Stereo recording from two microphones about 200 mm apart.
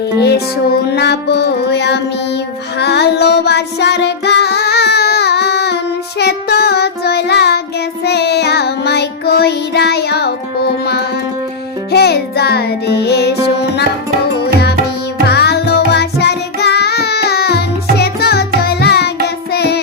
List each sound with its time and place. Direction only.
0.2 s music: 55° left (ahead or behind)
14.4 s music: 55° left (ahead or behind)